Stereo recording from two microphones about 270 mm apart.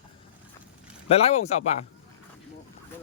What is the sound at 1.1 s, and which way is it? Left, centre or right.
Speech, left.